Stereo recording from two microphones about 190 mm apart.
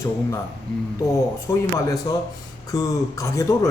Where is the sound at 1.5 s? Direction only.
20° left (ahead or behind).